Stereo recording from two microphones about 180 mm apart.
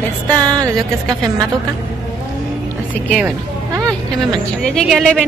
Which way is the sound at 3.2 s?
15° right (ahead or behind).